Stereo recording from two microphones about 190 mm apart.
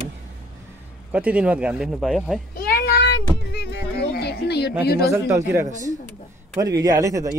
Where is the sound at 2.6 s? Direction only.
55° left (ahead or behind).